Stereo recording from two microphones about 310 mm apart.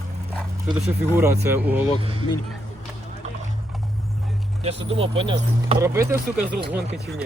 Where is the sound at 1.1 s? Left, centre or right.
Centre.